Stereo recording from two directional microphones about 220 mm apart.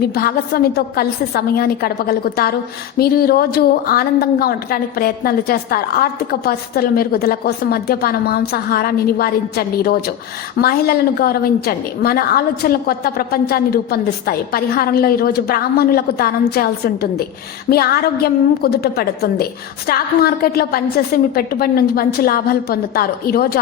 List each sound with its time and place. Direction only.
0.1 s a woman's voice: 45° left (ahead or behind)